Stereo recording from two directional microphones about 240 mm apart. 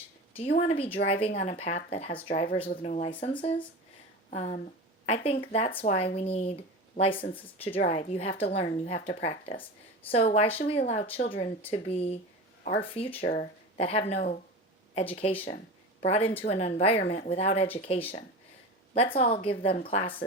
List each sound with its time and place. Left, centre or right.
0.5 s a woman's voice: left